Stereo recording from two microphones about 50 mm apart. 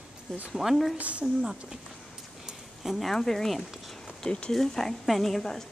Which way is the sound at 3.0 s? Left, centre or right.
Centre.